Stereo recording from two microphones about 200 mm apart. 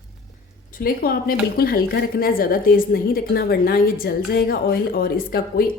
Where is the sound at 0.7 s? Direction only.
50° left (ahead or behind).